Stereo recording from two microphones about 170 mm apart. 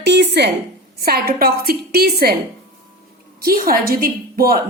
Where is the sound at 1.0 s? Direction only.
65° right (ahead or behind).